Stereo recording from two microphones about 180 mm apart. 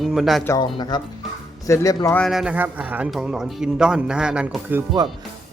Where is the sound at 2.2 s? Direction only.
Centre (ahead or behind).